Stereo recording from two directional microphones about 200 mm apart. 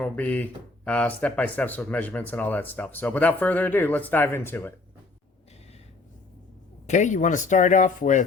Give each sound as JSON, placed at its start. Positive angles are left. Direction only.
{"t": 0.0, "sound": "speech", "side_deg": 5}
{"t": 6.8, "sound": "speech", "side_deg": 35}